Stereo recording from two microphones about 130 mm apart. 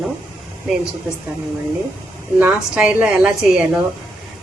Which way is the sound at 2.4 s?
10° right (ahead or behind).